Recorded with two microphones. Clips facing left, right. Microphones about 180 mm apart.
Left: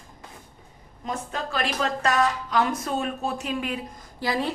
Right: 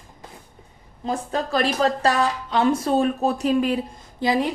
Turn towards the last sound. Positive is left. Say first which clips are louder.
# right 5 dB
turn(degrees=-20)  # may be behind; listen again after turning